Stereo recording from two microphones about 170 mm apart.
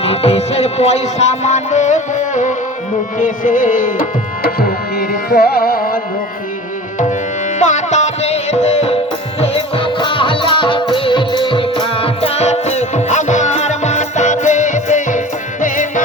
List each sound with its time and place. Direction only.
0.0 s music: 35° left (ahead or behind); by 4.0 s 50° left (ahead or behind)
4.9 s carnatic music: 65° left (ahead or behind)
7.6 s music: 45° left (ahead or behind)